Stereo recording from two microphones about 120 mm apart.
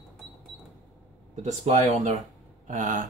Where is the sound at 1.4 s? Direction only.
75° right (ahead or behind).